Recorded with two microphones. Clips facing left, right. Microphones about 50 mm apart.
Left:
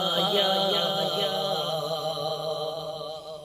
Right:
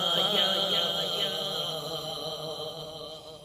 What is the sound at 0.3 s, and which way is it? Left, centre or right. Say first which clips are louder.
Music: left 4 dB; centre.